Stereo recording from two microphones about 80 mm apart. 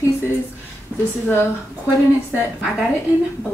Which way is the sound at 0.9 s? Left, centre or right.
Centre.